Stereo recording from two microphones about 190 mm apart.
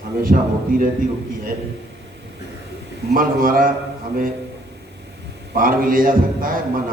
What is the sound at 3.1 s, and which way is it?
Speech, 50° right (ahead or behind).